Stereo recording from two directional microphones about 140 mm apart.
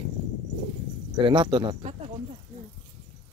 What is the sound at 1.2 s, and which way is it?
Speech, 35° right (ahead or behind).